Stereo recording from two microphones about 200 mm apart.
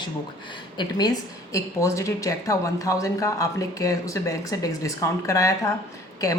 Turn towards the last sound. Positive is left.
turn(degrees=15)  # may be behind; listen again after turning